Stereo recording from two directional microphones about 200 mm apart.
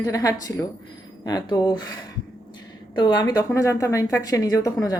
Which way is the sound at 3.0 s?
20° left (ahead or behind).